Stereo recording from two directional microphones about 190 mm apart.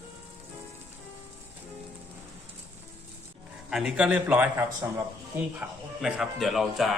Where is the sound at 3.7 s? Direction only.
5° right (ahead or behind).